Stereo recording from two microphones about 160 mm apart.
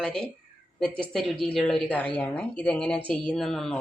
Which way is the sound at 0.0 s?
5° left (ahead or behind).